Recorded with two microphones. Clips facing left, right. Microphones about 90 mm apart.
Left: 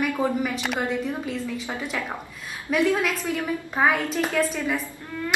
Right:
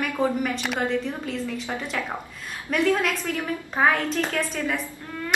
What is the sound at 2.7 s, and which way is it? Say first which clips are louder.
A woman's voice: even; 5° left (ahead or behind).